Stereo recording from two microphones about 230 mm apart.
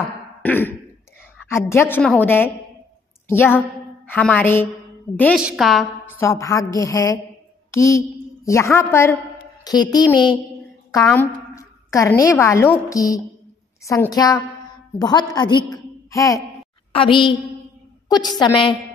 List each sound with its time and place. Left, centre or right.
0.4 s throat clearing: centre
1.5 s a woman's voice: centre